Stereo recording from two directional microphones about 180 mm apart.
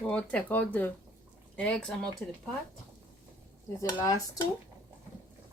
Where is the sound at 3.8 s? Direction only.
20° left (ahead or behind).